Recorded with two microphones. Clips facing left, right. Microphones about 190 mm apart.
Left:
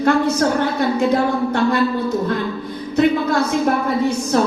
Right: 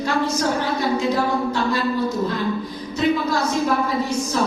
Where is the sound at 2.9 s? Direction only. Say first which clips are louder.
Left 4 dB; 55° left (ahead or behind).